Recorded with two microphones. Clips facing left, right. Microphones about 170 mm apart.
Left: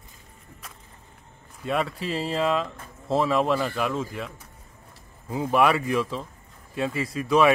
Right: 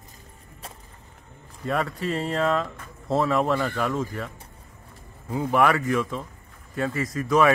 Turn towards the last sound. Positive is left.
turn(degrees=30)  # may be behind; listen again after turning